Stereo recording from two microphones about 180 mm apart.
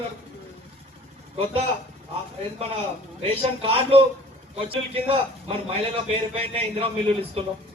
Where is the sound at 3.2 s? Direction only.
30° right (ahead or behind).